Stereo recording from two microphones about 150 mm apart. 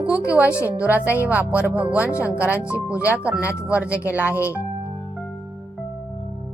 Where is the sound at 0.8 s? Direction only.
10° right (ahead or behind).